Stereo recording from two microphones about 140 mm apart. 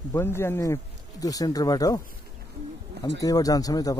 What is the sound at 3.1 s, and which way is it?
Speech, 25° left (ahead or behind).